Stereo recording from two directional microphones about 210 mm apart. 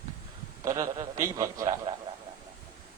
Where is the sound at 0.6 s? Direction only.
15° right (ahead or behind).